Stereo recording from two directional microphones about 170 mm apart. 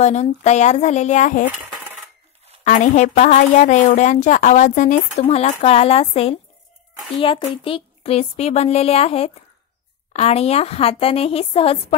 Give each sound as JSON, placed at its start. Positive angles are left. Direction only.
{"t": 0.0, "sound": "a woman's voice", "side_deg": 40}
{"t": 2.6, "sound": "a woman's voice", "side_deg": 45}